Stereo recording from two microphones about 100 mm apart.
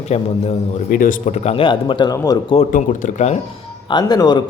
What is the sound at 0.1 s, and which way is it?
Speech, 90° left.